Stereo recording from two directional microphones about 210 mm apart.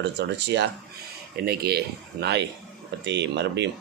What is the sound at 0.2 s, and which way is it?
Speech, 55° right (ahead or behind).